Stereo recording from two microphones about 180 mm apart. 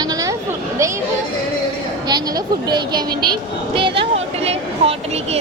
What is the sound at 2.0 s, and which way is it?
Speech, 20° right (ahead or behind).